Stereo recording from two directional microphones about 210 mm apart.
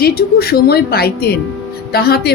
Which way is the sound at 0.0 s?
45° left (ahead or behind).